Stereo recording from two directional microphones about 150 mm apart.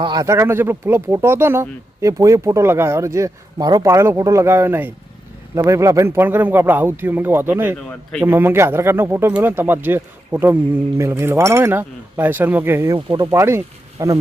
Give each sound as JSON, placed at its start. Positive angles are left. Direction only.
{"t": 0.0, "sound": "speech", "side_deg": -25}